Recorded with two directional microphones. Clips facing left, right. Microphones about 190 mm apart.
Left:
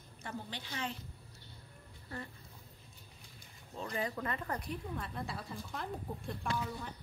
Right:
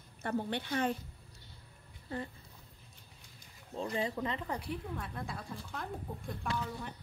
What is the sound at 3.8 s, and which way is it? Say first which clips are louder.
Speech: right 3 dB; 25° right (ahead or behind).